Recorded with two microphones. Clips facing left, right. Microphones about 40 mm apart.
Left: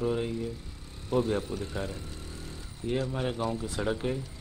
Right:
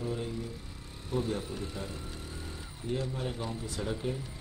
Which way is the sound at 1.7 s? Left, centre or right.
Centre.